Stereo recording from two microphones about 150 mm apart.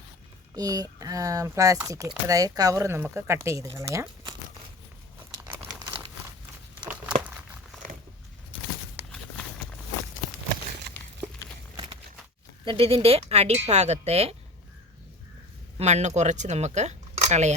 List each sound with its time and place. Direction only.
0.5 s speech: 25° right (ahead or behind)
6.7 s crumpling: 10° right (ahead or behind)
10.9 s a sound: 90° right
12.6 s speech: 40° right (ahead or behind)
15.8 s speech: 50° right (ahead or behind)